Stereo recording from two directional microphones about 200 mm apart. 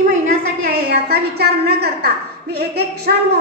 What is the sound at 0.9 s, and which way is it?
A woman's voice, 55° right (ahead or behind).